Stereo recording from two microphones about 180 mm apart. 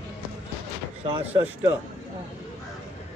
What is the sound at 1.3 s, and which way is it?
Speech, 10° right (ahead or behind).